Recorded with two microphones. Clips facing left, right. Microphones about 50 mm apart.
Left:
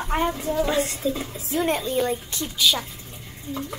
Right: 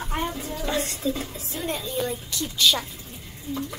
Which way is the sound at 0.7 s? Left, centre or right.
Centre.